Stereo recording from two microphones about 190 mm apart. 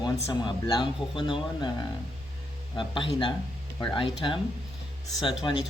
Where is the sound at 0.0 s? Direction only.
20° left (ahead or behind).